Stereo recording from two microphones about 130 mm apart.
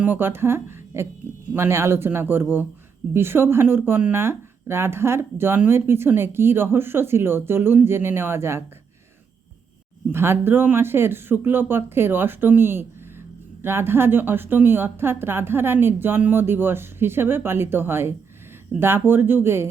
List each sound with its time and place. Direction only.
0.0 s a woman's voice: 15° right (ahead or behind)
10.1 s speech: 20° right (ahead or behind)